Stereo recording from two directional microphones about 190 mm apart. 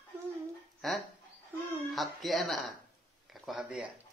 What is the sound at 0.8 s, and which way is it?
Speech, centre (ahead or behind).